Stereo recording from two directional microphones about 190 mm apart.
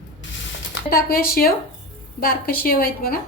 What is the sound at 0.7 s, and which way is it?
A woman's voice, 50° left (ahead or behind).